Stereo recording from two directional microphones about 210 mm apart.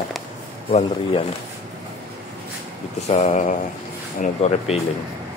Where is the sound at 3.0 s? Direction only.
30° left (ahead or behind).